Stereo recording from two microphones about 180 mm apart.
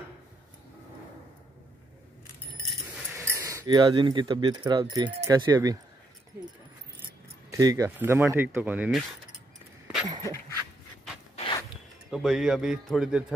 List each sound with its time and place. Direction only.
3.2 s speech: 15° right (ahead or behind)
7.1 s speech: 20° right (ahead or behind)
11.3 s a sound: 30° left (ahead or behind)
11.7 s speech: centre (ahead or behind)